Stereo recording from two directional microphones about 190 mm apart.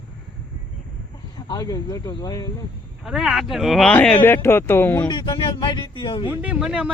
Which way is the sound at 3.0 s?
Centre (ahead or behind).